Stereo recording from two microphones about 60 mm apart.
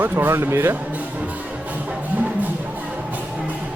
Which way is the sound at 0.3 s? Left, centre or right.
Right.